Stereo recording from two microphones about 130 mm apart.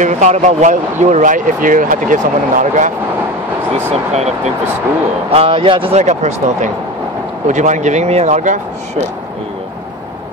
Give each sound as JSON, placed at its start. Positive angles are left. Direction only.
{"t": 0.0, "sound": "speech", "side_deg": -65}
{"t": 3.7, "sound": "speech", "side_deg": -60}
{"t": 5.3, "sound": "a man's voice", "side_deg": -45}
{"t": 5.9, "sound": "speech", "side_deg": -65}